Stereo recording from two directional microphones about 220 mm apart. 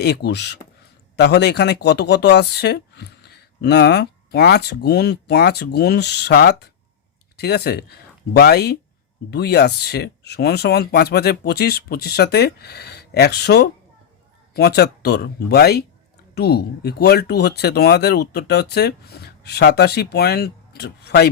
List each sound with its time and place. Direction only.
0.0 s speech: 50° left (ahead or behind)